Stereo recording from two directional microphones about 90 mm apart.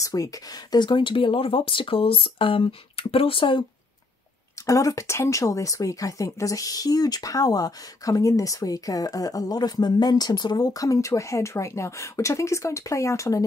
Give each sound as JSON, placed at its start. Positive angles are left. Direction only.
{"t": 0.0, "sound": "speech", "side_deg": 40}
{"t": 4.6, "sound": "speech", "side_deg": 35}